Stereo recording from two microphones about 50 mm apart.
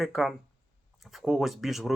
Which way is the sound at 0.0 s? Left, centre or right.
Centre.